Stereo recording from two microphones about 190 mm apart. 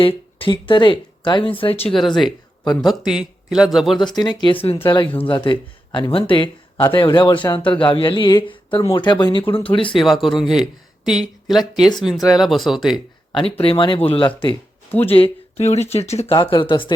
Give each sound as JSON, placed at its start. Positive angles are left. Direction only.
{"t": 0.0, "sound": "speech", "side_deg": 30}
{"t": 2.0, "sound": "speech", "side_deg": 0}
{"t": 3.9, "sound": "speech", "side_deg": 20}
{"t": 10.0, "sound": "speech", "side_deg": 0}
{"t": 13.3, "sound": "speech", "side_deg": 30}